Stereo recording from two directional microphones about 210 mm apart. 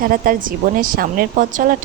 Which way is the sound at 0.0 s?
40° right (ahead or behind).